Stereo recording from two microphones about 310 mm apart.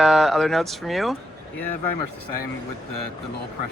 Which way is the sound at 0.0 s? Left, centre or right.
Centre.